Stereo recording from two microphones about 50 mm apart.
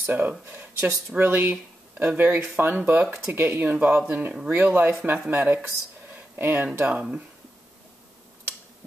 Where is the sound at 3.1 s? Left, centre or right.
Right.